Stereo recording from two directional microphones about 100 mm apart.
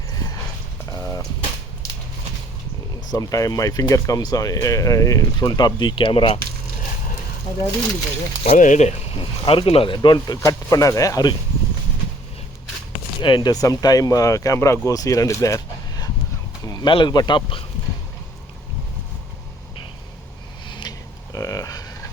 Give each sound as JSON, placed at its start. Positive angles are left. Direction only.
{"t": 0.9, "sound": "a sound", "side_deg": 35}
{"t": 3.1, "sound": "speech", "side_deg": 35}
{"t": 7.5, "sound": "speech", "side_deg": 55}
{"t": 8.4, "sound": "speech", "side_deg": 80}
{"t": 9.4, "sound": "speech", "side_deg": 65}
{"t": 10.4, "sound": "speech", "side_deg": 35}
{"t": 13.2, "sound": "speech", "side_deg": 50}
{"t": 16.8, "sound": "speech", "side_deg": 50}
{"t": 20.7, "sound": "a sound", "side_deg": 45}
{"t": 21.3, "sound": "a sound", "side_deg": 35}